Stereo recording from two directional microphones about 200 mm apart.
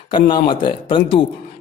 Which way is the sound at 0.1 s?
25° left (ahead or behind).